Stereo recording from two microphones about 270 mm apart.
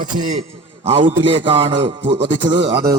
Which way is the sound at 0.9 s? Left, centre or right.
Centre.